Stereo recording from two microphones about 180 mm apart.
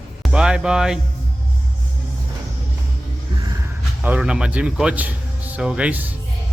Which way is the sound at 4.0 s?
5° right (ahead or behind).